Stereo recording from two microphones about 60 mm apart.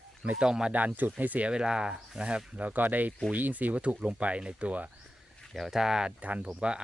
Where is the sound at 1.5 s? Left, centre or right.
Centre.